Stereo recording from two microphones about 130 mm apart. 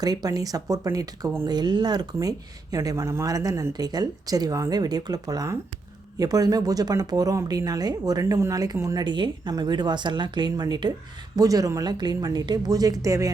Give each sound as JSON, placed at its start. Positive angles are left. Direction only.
{"t": 0.0, "sound": "speech", "side_deg": -30}
{"t": 1.5, "sound": "speech", "side_deg": -35}